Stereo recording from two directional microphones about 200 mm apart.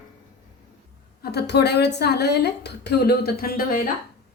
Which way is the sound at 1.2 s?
55° left (ahead or behind).